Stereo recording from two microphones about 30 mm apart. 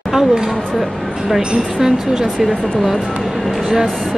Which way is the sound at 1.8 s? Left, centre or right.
Centre.